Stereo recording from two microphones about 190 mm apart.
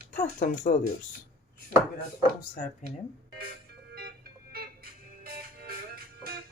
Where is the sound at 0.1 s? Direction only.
40° left (ahead or behind).